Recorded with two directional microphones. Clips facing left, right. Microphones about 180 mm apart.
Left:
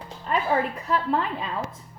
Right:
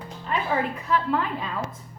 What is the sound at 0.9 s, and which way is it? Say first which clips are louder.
Speech: right 2 dB; 35° left (ahead or behind).